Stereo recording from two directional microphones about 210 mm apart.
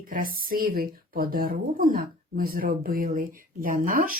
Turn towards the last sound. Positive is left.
turn(degrees=-40)  # may be behind; listen again after turning